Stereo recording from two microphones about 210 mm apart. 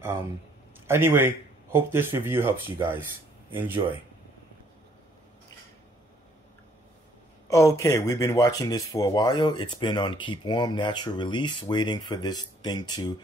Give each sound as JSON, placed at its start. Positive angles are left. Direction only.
{"t": 0.8, "sound": "a man's voice", "side_deg": -10}
{"t": 3.5, "sound": "speech", "side_deg": -10}
{"t": 7.4, "sound": "speech", "side_deg": 15}